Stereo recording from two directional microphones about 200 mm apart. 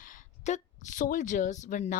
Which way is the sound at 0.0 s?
40° left (ahead or behind).